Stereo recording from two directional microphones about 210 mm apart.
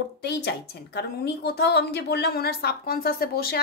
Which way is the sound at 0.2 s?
55° left (ahead or behind).